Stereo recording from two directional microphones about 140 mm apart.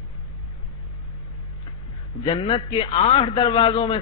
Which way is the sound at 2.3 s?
40° left (ahead or behind).